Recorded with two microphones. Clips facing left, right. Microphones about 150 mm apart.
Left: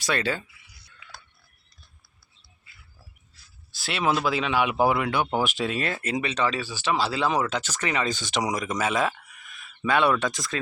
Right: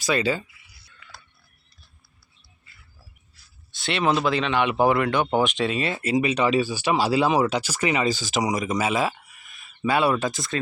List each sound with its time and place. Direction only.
0.0 s speech: centre (ahead or behind)
3.7 s speech: centre (ahead or behind)